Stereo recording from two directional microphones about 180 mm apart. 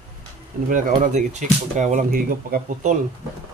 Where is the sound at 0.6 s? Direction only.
45° right (ahead or behind).